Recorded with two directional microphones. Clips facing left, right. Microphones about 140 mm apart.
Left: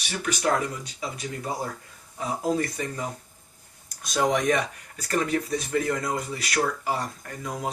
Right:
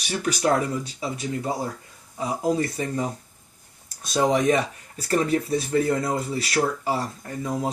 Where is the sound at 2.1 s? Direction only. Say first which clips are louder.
Right 2 dB; 20° right (ahead or behind).